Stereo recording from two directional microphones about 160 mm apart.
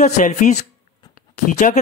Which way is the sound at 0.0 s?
50° left (ahead or behind).